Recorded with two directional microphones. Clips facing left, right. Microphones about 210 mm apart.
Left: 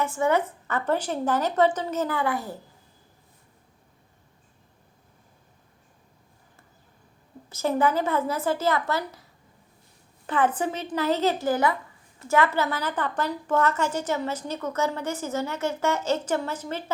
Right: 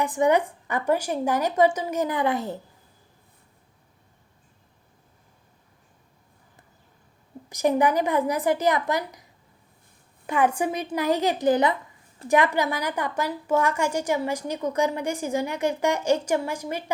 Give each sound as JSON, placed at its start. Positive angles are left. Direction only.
{"t": 0.0, "sound": "a woman's voice", "side_deg": -15}
{"t": 7.5, "sound": "a woman's voice", "side_deg": -15}
{"t": 10.2, "sound": "a woman's voice", "side_deg": -10}